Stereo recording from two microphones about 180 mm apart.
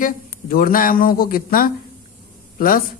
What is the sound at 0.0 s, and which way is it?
Speech, 50° left (ahead or behind).